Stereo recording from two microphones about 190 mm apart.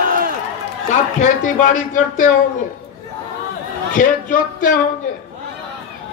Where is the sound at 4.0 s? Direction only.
45° left (ahead or behind).